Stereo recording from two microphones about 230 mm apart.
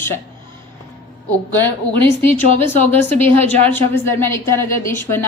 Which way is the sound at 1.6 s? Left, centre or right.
Right.